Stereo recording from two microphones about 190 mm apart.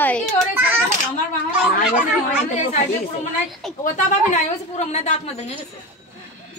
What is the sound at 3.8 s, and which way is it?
A woman's voice, 40° left (ahead or behind).